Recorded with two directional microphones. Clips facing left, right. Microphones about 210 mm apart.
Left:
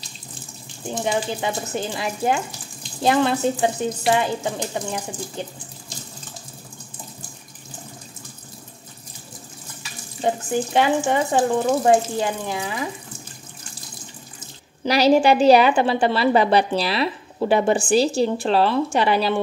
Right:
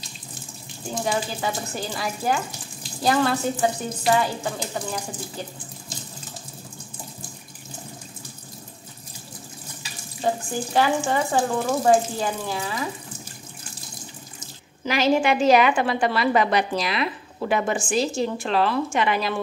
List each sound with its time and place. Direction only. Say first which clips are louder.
0.9 s speech: left 2 dB; 20° left (ahead or behind)
10.2 s speech: left 3 dB; 20° left (ahead or behind)
14.9 s a woman's voice: left 5 dB; 35° left (ahead or behind)